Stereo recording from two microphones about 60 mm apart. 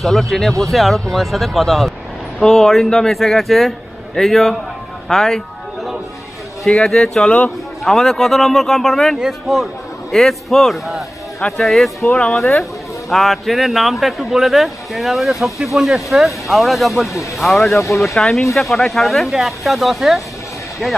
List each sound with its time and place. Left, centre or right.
0.0 s speech: centre
5.0 s a sound: centre
6.6 s speech: centre
7.2 s a man's voice: left
7.8 s a man's voice: centre
12.1 s speech: centre
12.4 s speech: centre
17.7 s speech: left
18.0 s speech: centre